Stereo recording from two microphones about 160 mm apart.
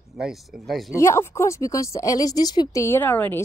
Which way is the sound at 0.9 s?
15° left (ahead or behind).